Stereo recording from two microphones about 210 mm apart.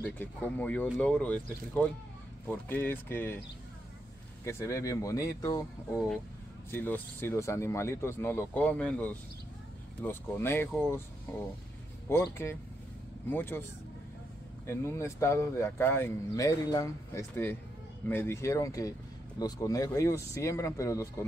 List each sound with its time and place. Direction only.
0.0 s speech: 10° left (ahead or behind)
4.5 s speech: 15° left (ahead or behind)
6.7 s speech: 10° left (ahead or behind)
12.1 s speech: 10° left (ahead or behind)
14.7 s speech: 15° left (ahead or behind)